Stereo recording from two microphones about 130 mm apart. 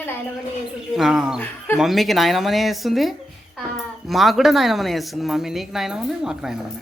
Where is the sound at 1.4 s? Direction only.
15° left (ahead or behind).